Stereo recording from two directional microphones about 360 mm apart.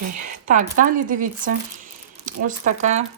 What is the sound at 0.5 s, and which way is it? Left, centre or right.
Speech, right.